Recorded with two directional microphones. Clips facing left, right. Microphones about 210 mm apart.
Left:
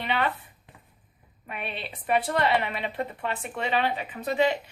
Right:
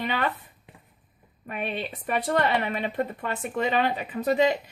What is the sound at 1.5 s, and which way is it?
Speech, 45° right (ahead or behind).